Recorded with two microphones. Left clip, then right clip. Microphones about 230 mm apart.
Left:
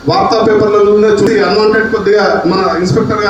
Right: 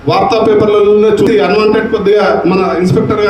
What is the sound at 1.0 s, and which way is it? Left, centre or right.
A man's voice, right.